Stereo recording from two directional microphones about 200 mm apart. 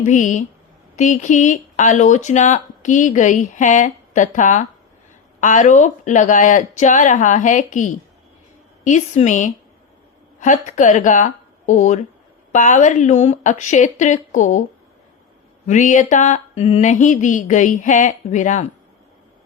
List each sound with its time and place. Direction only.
0.0 s speech: 40° left (ahead or behind)
15.6 s speech: 40° left (ahead or behind)